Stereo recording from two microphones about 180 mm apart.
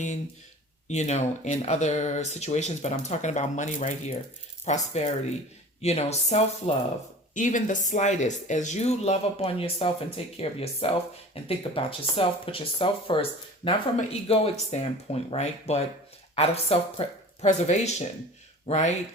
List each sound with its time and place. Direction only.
0.9 s speech: 40° left (ahead or behind)